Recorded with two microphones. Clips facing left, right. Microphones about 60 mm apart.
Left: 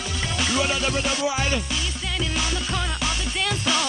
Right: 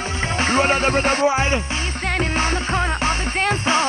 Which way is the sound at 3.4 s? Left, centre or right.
Right.